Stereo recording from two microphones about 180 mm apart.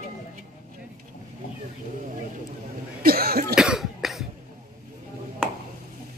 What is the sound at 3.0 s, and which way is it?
Cough, 55° right (ahead or behind).